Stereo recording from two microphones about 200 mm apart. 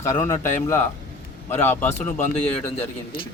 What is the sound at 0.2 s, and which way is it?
Speech, 40° left (ahead or behind).